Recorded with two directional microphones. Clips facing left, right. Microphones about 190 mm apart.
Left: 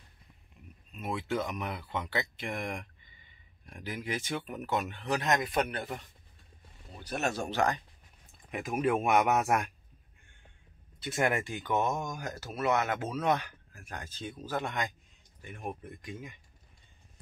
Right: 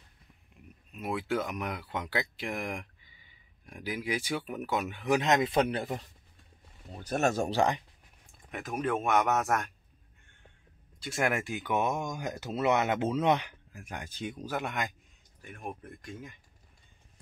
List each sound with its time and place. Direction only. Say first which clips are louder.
0.9 s speech: right 1 dB; 10° right (ahead or behind)
5.4 s speech: right 4 dB; 25° right (ahead or behind)
7.0 s speech: right 5 dB; 45° right (ahead or behind)
8.5 s speech: left 2 dB; 5° left (ahead or behind)
11.1 s speech: even; centre (ahead or behind)
15.4 s speech: left 1 dB; centre (ahead or behind)